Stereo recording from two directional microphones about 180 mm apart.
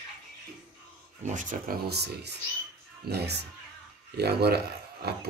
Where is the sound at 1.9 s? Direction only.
65° right (ahead or behind).